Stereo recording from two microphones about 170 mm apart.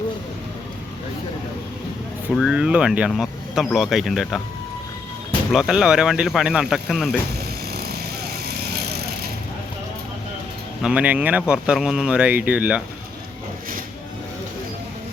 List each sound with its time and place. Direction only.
2.3 s speech: 5° right (ahead or behind)
5.5 s speech: 5° right (ahead or behind)
7.7 s vehicle: 70° right (ahead or behind)
10.8 s speech: 10° right (ahead or behind)